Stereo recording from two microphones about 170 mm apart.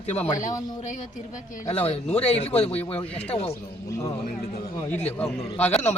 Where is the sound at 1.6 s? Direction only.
35° left (ahead or behind).